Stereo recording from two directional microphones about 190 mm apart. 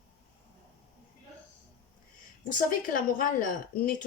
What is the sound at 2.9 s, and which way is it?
A woman's voice, 45° left (ahead or behind).